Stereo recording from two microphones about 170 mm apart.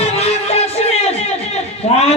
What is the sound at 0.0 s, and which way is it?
Music, 40° left (ahead or behind).